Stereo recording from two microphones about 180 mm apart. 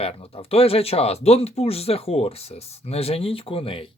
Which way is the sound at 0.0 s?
35° left (ahead or behind).